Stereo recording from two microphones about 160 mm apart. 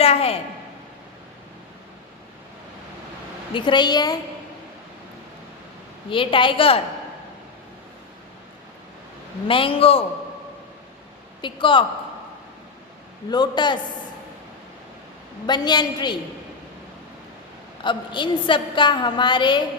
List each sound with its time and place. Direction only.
0.0 s a woman's voice: 40° left (ahead or behind)
3.5 s a woman's voice: 30° left (ahead or behind)
6.1 s a woman's voice: 35° left (ahead or behind)
9.5 s a woman's voice: 35° left (ahead or behind)
11.4 s a woman's voice: 30° left (ahead or behind)
13.3 s a woman's voice: 25° left (ahead or behind)
15.4 s a woman's voice: 25° left (ahead or behind)
17.8 s a woman's voice: 30° left (ahead or behind)